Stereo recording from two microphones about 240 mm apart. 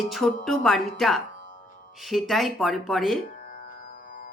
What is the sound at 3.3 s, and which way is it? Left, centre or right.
Music, left.